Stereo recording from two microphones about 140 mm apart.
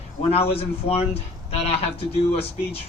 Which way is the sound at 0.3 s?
45° left (ahead or behind).